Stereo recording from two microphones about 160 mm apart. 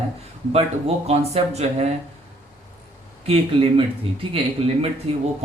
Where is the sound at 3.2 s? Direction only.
35° right (ahead or behind).